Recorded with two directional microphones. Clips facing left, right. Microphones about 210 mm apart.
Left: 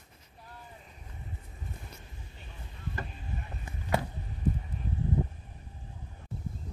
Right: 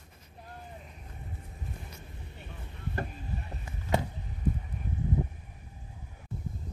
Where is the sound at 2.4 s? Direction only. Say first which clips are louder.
Right 3 dB; 55° right (ahead or behind).